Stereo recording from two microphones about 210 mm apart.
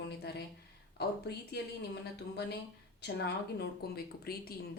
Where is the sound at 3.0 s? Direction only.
50° left (ahead or behind).